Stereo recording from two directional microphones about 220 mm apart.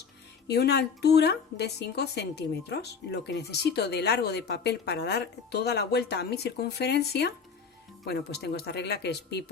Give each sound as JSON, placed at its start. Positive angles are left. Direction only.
{"t": 0.4, "sound": "a woman's voice", "side_deg": 50}